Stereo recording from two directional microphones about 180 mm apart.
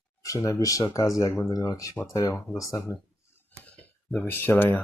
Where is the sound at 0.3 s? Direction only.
20° left (ahead or behind).